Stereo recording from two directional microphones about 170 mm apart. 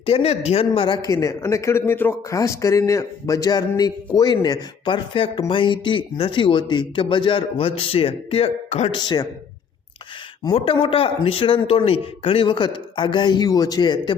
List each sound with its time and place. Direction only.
0.0 s a man's voice: 35° left (ahead or behind)
10.4 s a man's voice: 30° left (ahead or behind)